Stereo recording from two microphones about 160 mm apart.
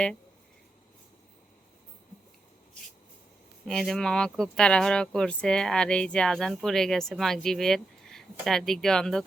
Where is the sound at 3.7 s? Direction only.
5° left (ahead or behind).